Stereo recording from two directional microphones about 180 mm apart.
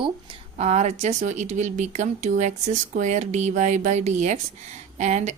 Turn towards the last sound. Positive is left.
turn(degrees=-40)  # may be behind; listen again after turning